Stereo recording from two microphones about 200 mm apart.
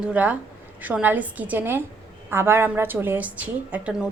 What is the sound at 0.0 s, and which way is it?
A woman's voice, 5° right (ahead or behind).